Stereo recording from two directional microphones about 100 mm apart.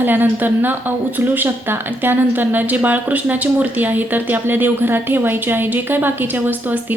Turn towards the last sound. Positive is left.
turn(degrees=-20)  # may be behind; listen again after turning